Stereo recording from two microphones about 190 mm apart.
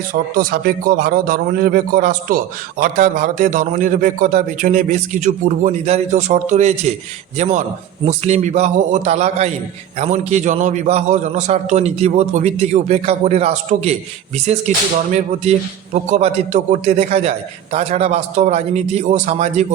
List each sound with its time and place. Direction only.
0.1 s a man's voice: 50° right (ahead or behind)
15.1 s a man's voice: 40° right (ahead or behind)